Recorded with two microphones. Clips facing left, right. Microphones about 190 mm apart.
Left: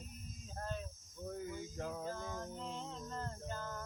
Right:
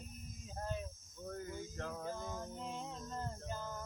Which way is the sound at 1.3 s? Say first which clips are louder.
Left 1 dB; 10° left (ahead or behind).